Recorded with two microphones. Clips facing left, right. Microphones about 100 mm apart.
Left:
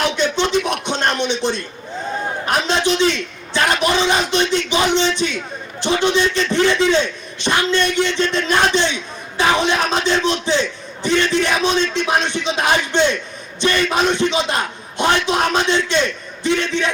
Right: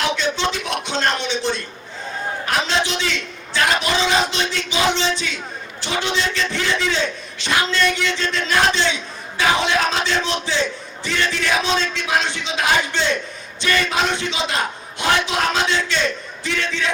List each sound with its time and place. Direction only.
0.0 s a sound: 20° left (ahead or behind)
2.5 s a man's voice: 20° left (ahead or behind)
11.0 s a man's voice: 20° left (ahead or behind)